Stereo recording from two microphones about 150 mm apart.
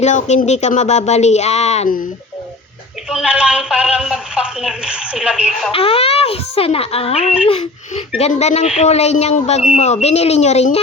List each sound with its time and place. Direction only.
0.0 s a woman's voice: 50° left (ahead or behind)
3.1 s a woman's voice: 5° right (ahead or behind)
5.7 s a woman's voice: 40° left (ahead or behind)